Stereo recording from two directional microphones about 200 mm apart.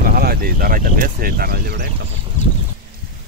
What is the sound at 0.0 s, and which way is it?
Speech, 50° right (ahead or behind).